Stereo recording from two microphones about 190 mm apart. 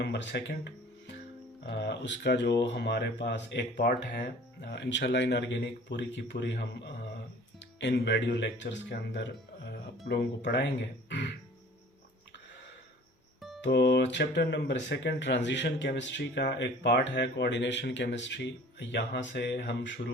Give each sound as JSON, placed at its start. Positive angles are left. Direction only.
{"t": 0.0, "sound": "speech", "side_deg": 65}
{"t": 13.6, "sound": "speech", "side_deg": 65}